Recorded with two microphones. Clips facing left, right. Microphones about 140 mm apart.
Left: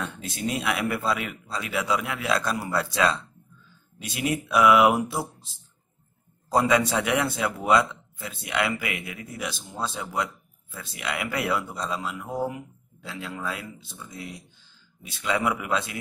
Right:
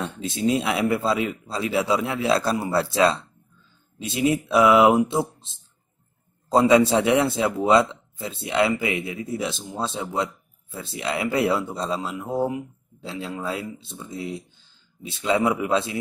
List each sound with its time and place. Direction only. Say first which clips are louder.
0.0 s speech: right 6 dB; 25° right (ahead or behind)